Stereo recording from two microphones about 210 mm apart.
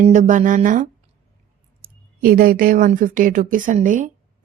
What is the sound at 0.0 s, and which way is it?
Speech, 35° right (ahead or behind).